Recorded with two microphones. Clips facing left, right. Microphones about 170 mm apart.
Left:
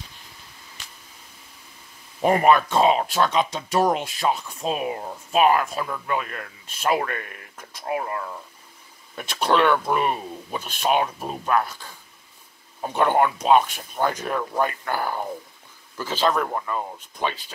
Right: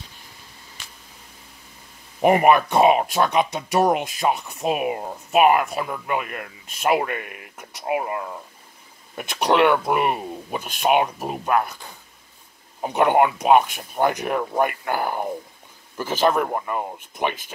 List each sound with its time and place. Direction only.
2.2 s speech: 10° right (ahead or behind)